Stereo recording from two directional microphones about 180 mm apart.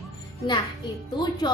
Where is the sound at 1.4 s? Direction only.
25° left (ahead or behind).